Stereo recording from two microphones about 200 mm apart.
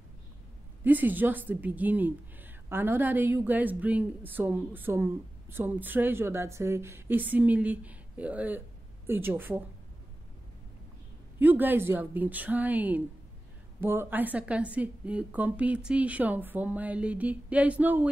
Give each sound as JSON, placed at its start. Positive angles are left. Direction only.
{"t": 0.8, "sound": "a woman's voice", "side_deg": -10}
{"t": 11.3, "sound": "a woman's voice", "side_deg": -10}